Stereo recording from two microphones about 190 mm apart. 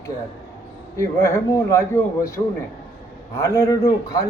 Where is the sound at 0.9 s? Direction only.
15° left (ahead or behind).